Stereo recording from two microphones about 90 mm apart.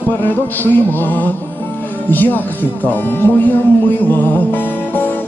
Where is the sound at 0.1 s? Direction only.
20° left (ahead or behind).